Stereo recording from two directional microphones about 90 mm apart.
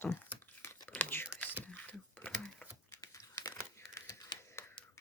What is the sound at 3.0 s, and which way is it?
Crumpling, 35° left (ahead or behind).